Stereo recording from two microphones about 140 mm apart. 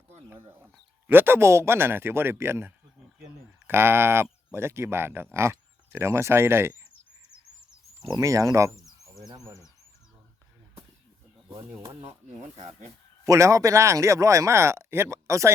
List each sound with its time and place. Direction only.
1.0 s speech: 15° right (ahead or behind)
8.0 s speech: 25° right (ahead or behind)
11.8 s speech: 30° right (ahead or behind)
12.0 s speech: 45° right (ahead or behind)
13.2 s speech: 20° right (ahead or behind)